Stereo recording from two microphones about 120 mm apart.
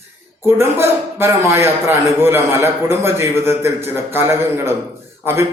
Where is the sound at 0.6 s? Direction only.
20° right (ahead or behind).